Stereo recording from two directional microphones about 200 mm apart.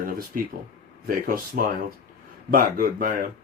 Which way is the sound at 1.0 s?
45° right (ahead or behind).